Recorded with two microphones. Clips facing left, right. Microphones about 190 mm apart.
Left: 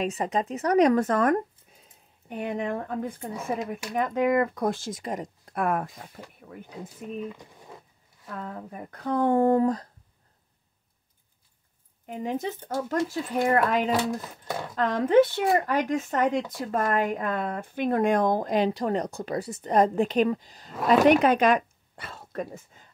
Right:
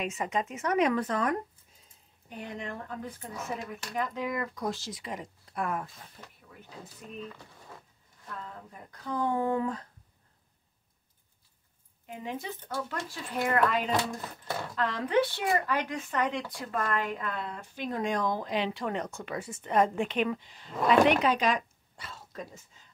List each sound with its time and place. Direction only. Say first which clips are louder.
0.0 s speech: left 5 dB; 35° left (ahead or behind); by 6.2 s 60° left (ahead or behind)
7.2 s speech: left 4 dB; 15° left (ahead or behind)
8.4 s speech: left 10 dB; 60° left (ahead or behind); by 9.8 s 40° left (ahead or behind)
12.1 s speech: left 7 dB; 45° left (ahead or behind)
21.1 s speech: left 6 dB; 50° left (ahead or behind)